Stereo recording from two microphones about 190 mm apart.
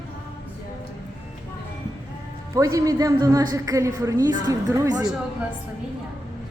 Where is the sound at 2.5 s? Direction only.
15° right (ahead or behind).